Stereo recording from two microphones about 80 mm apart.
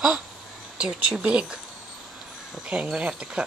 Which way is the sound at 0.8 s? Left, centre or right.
Centre.